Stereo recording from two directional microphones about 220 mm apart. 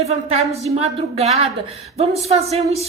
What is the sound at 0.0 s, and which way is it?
A woman's voice, 30° right (ahead or behind).